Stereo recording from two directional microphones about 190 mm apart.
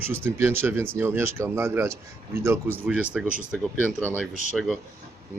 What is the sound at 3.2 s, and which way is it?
Speech, 5° right (ahead or behind).